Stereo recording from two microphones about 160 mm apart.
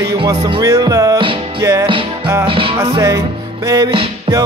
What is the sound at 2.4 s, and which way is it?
Music, 35° right (ahead or behind).